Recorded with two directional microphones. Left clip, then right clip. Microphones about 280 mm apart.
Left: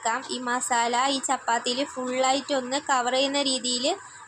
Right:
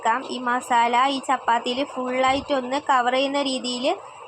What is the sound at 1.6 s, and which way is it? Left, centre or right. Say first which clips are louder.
Speech: right 2 dB; right.